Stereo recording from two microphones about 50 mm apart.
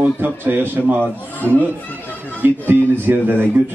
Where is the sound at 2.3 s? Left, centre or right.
Right.